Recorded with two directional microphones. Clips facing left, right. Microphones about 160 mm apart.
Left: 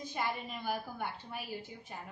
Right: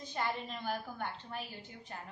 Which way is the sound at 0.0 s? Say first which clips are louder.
Even; 10° left (ahead or behind).